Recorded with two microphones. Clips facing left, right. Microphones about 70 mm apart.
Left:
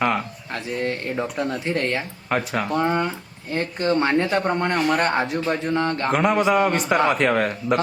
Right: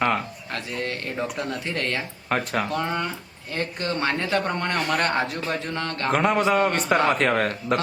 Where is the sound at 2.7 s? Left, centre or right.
Centre.